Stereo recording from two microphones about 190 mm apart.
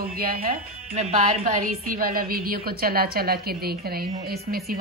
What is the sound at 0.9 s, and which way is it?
Speech, 30° right (ahead or behind).